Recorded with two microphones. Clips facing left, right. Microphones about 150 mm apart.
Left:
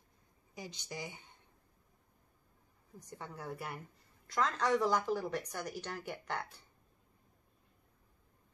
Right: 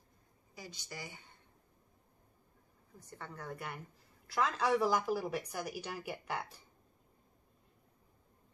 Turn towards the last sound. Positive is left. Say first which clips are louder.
# even
turn(degrees=-10)  # may be behind; listen again after turning